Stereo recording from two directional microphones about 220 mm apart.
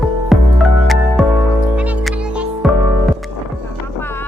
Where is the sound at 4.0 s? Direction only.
10° left (ahead or behind).